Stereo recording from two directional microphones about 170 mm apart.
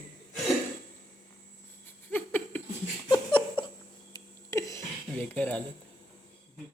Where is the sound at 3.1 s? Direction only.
30° left (ahead or behind).